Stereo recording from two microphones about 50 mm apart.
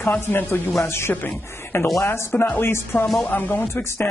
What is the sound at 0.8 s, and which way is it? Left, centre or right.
Speech, left.